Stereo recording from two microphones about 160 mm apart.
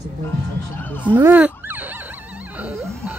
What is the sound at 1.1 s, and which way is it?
Fowl, 10° right (ahead or behind).